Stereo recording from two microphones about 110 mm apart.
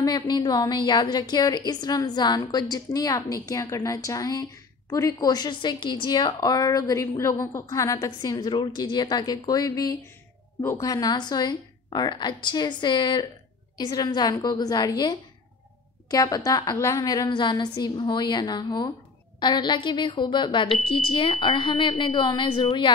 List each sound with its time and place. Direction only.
0.0 s a woman's voice: 35° left (ahead or behind)